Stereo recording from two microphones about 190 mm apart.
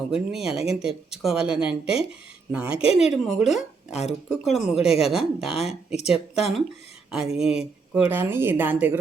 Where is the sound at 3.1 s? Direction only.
Centre (ahead or behind).